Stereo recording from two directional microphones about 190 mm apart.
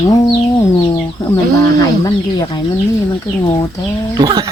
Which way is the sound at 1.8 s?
20° left (ahead or behind).